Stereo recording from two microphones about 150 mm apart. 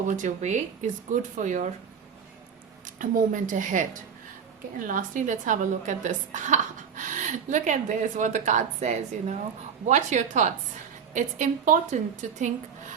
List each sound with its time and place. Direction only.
0.1 s a woman's voice: 55° right (ahead or behind)
2.8 s a woman's voice: 65° right (ahead or behind)